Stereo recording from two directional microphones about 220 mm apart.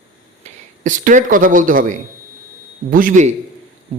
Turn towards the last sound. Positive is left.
turn(degrees=-35)  # may be behind; listen again after turning